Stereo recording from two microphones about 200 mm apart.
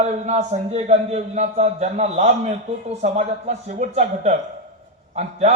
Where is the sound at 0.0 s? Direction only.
35° right (ahead or behind).